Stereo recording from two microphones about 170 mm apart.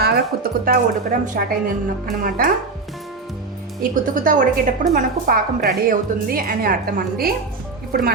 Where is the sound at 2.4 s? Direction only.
60° right (ahead or behind).